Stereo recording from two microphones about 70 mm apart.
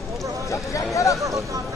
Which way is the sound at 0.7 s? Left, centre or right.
Left.